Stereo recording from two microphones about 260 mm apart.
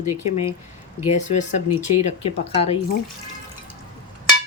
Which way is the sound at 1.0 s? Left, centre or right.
Left.